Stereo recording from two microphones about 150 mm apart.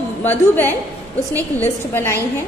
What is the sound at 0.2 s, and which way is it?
A woman's voice, 15° left (ahead or behind).